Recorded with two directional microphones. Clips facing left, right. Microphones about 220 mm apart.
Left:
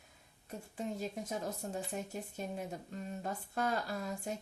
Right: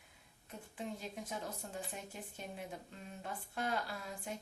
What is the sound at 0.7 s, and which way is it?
Speech, 40° left (ahead or behind).